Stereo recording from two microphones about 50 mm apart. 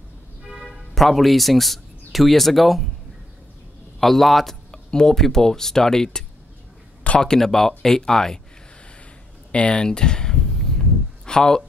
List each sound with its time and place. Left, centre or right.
0.5 s speech: centre
4.0 s a man's voice: centre
9.5 s a sound: centre